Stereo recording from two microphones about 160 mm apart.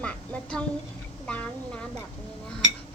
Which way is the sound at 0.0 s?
5° left (ahead or behind).